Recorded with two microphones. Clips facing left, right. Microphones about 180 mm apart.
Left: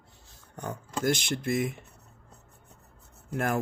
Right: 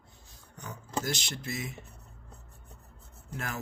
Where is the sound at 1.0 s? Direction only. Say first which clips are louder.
Left 8 dB; 55° left (ahead or behind).